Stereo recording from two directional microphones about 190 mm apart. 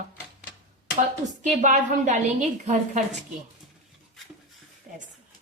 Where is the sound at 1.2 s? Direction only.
40° right (ahead or behind).